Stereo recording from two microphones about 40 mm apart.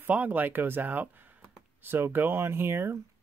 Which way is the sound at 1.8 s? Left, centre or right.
Right.